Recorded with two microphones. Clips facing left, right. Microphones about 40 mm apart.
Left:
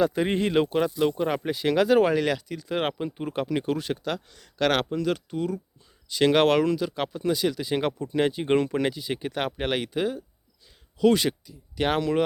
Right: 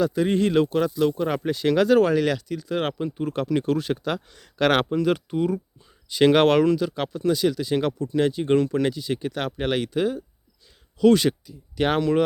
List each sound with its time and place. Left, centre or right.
0.0 s speech: left; by 3.9 s centre
3.9 s speech: centre
6.1 s speech: centre